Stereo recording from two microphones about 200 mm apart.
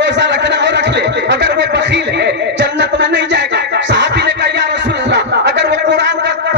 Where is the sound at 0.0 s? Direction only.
60° right (ahead or behind).